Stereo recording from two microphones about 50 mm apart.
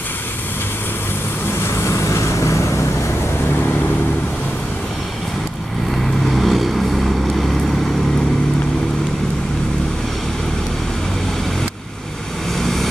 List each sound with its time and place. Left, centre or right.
1.5 s vehicle: left
6.2 s vehicle: centre
12.5 s vehicle: centre